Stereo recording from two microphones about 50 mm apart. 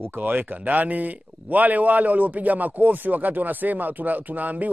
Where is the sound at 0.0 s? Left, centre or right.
Right.